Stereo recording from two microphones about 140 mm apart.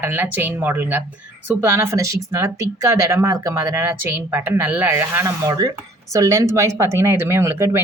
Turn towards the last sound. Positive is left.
turn(degrees=-20)  # may be behind; listen again after turning